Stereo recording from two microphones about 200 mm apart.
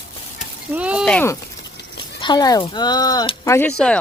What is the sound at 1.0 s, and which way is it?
Speech, 10° left (ahead or behind).